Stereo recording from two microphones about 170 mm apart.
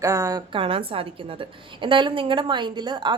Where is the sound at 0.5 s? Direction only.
30° right (ahead or behind).